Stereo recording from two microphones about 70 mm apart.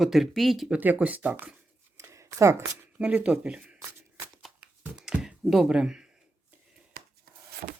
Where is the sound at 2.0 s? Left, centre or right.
Right.